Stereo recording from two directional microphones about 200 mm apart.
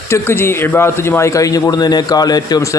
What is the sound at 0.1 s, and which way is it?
A man's voice, 10° left (ahead or behind).